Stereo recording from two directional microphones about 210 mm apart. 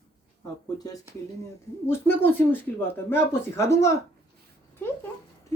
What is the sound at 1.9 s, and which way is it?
Speech, 10° left (ahead or behind).